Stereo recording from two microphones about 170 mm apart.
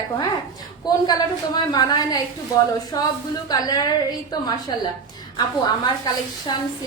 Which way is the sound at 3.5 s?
20° left (ahead or behind).